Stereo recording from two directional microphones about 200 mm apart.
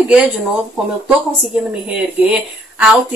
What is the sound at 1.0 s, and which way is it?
A woman's voice, 5° right (ahead or behind).